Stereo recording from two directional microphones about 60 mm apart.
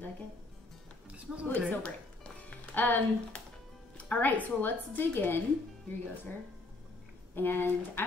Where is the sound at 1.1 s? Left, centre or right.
Right.